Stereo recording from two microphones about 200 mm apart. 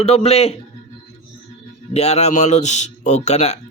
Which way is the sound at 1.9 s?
35° left (ahead or behind).